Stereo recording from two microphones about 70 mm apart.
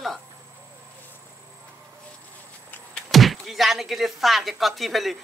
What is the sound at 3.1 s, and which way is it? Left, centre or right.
Speech, centre.